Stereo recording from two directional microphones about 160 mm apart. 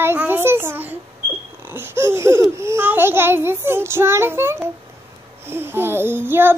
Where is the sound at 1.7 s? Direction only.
15° right (ahead or behind).